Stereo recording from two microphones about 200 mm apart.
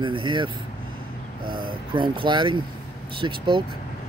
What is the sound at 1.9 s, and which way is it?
Speech, 25° right (ahead or behind).